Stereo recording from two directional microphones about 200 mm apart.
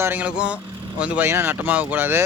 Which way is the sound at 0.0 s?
10° right (ahead or behind).